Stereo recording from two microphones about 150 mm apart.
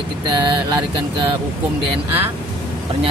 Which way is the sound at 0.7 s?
35° right (ahead or behind).